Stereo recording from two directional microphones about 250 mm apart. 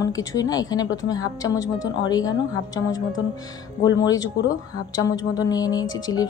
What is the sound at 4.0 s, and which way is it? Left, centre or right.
A woman's voice, centre.